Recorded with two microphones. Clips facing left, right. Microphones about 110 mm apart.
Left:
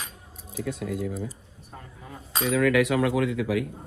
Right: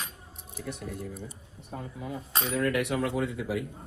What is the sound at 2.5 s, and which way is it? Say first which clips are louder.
Speech: left 6 dB; 90° left.